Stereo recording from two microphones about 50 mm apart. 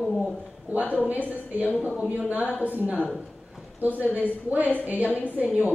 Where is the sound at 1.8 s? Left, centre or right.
Centre.